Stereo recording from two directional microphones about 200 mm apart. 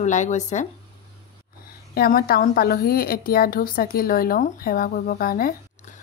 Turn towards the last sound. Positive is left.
turn(degrees=45)  # may be behind; listen again after turning